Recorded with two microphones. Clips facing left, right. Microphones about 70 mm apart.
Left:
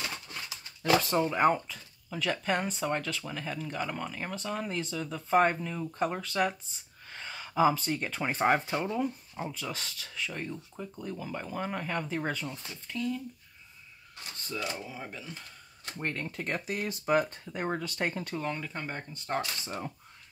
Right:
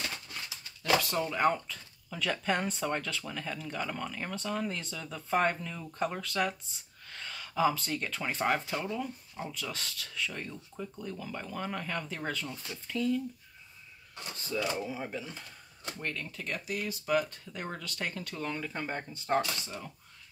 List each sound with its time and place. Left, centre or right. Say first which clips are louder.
1.1 s speech: left 3 dB; centre
12.4 s speech: even; centre
14.9 s speech: right 4 dB; centre
16.0 s speech: left 4 dB; left
18.3 s speech: left 2 dB; centre